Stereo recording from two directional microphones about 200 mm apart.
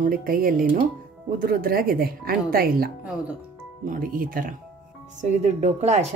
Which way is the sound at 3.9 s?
45° right (ahead or behind).